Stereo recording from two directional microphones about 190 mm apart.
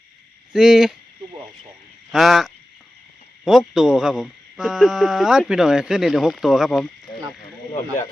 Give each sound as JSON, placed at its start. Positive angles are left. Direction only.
{"t": 0.5, "sound": "speech", "side_deg": -5}
{"t": 2.1, "sound": "speech", "side_deg": 0}
{"t": 7.7, "sound": "speech", "side_deg": 30}